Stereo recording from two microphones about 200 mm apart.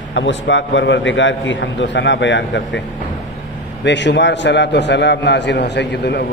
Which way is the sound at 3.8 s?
60° left (ahead or behind).